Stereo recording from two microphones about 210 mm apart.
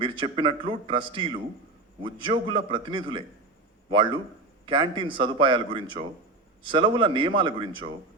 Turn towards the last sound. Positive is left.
turn(degrees=-25)  # may be behind; listen again after turning